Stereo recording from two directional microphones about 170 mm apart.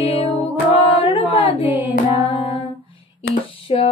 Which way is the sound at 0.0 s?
30° left (ahead or behind).